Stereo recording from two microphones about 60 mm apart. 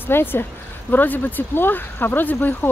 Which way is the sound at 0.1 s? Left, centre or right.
Left.